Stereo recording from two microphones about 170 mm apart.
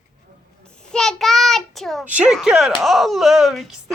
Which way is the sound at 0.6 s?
5° left (ahead or behind).